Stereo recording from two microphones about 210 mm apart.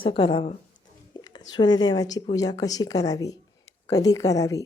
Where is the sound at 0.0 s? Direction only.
25° left (ahead or behind).